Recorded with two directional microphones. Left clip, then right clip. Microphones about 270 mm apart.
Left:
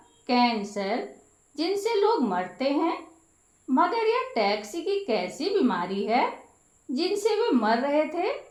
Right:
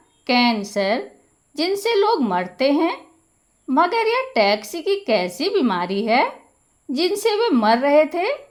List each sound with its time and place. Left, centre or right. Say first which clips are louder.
0.3 s a woman's voice: right 5 dB; right